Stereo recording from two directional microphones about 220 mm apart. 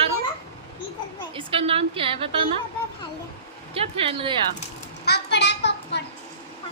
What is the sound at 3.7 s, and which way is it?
Speech, 25° right (ahead or behind).